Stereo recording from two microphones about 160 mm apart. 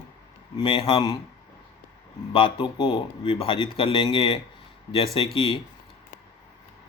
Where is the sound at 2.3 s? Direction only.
30° left (ahead or behind).